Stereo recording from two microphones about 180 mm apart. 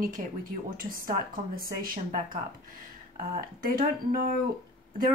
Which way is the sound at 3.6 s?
55° right (ahead or behind).